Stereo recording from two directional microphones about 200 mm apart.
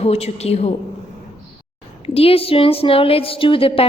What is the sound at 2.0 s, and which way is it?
A woman's voice, 30° left (ahead or behind).